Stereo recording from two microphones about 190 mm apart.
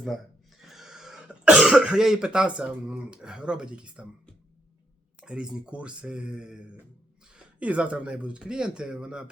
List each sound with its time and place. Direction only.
0.7 s speech: centre (ahead or behind)
5.2 s speech: 5° right (ahead or behind)